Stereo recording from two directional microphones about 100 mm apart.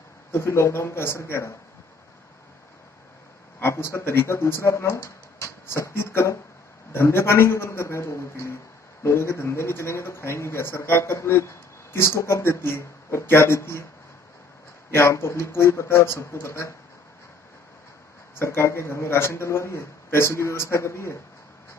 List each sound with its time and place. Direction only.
0.3 s speech: 25° left (ahead or behind)
3.5 s speech: 25° left (ahead or behind)
14.9 s speech: 25° left (ahead or behind)
18.4 s speech: 25° left (ahead or behind)